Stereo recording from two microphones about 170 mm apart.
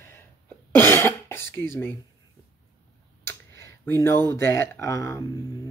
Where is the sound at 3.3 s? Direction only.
15° left (ahead or behind).